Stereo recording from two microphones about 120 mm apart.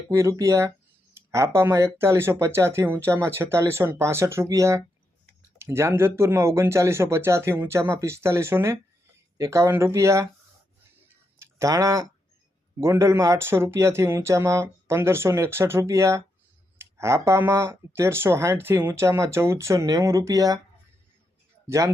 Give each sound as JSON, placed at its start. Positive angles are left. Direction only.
{"t": 0.1, "sound": "speech", "side_deg": -25}
{"t": 11.3, "sound": "speech", "side_deg": -25}
{"t": 21.7, "sound": "speech", "side_deg": -25}